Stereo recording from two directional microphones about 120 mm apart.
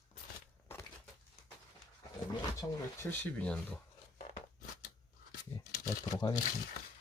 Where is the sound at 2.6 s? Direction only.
20° left (ahead or behind).